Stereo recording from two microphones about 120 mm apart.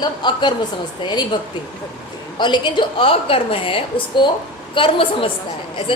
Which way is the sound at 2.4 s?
40° left (ahead or behind).